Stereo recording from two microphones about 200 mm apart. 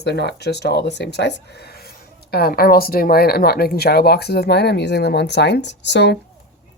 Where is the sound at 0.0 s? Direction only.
55° left (ahead or behind).